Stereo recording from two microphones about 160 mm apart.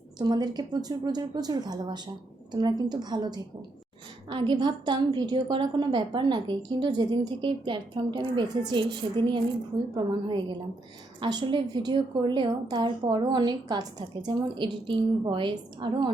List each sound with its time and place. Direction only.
0.2 s a woman's voice: 25° right (ahead or behind)